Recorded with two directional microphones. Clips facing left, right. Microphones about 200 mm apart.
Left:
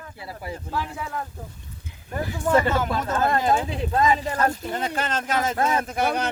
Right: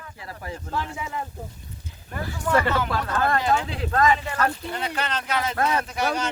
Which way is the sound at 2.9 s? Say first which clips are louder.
Left 1 dB; 20° left (ahead or behind).